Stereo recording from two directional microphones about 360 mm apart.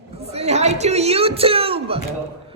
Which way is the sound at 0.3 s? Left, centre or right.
Centre.